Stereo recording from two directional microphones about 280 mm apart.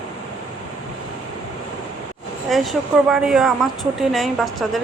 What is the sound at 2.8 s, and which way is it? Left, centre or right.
Speech, centre.